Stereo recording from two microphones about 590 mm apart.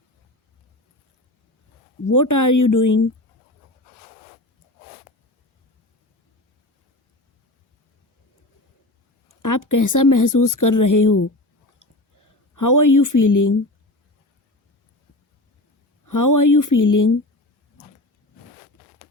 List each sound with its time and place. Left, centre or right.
2.0 s speech: left
9.4 s speech: left
12.5 s speech: left
16.0 s speech: left